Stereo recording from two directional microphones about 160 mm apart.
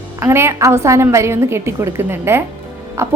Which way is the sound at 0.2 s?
15° right (ahead or behind).